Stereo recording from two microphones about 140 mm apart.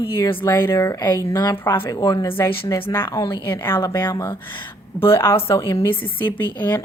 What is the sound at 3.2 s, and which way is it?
Speech, 35° left (ahead or behind).